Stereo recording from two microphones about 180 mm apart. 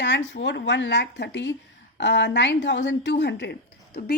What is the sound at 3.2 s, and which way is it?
Speech, 70° left (ahead or behind).